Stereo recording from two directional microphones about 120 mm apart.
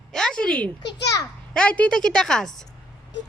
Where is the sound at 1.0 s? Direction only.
30° left (ahead or behind).